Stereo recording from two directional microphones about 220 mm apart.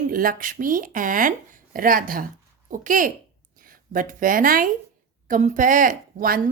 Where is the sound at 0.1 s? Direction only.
40° right (ahead or behind).